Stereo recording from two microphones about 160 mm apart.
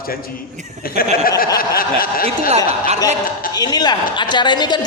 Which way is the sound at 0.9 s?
70° left (ahead or behind).